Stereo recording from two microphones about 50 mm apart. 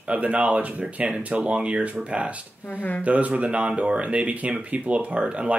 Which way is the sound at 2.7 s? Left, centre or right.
Left.